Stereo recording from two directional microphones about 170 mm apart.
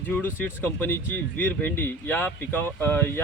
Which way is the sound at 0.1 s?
10° left (ahead or behind).